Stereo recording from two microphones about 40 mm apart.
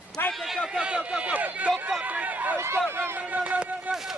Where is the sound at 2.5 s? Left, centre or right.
Right.